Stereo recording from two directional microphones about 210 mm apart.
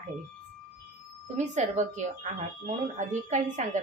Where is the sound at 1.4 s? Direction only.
35° right (ahead or behind).